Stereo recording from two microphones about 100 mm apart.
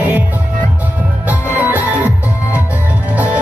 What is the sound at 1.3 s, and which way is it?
Music, 15° right (ahead or behind).